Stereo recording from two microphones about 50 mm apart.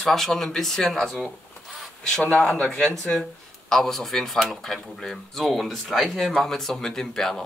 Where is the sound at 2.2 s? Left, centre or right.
Left.